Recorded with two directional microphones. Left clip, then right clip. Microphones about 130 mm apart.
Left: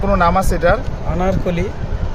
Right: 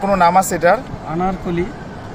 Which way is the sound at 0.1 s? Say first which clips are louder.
Right 2 dB; 5° right (ahead or behind).